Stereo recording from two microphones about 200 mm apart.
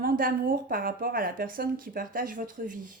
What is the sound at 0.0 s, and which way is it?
Speech, 45° right (ahead or behind).